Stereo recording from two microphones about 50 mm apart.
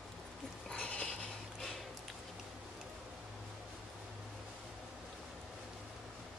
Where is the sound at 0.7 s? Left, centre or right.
Left.